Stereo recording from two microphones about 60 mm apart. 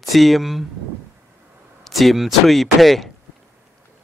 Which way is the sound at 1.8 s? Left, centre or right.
Centre.